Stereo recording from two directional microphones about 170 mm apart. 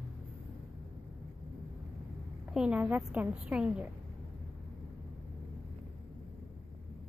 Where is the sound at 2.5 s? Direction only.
5° right (ahead or behind).